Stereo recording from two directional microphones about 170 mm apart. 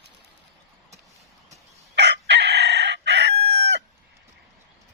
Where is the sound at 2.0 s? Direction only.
90° right.